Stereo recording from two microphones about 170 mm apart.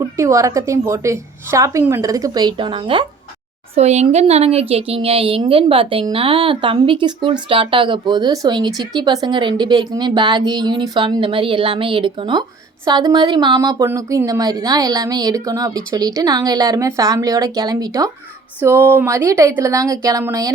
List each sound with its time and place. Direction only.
0.0 s speech: 15° right (ahead or behind)
3.8 s a woman's voice: 40° right (ahead or behind); by 20.5 s 20° right (ahead or behind)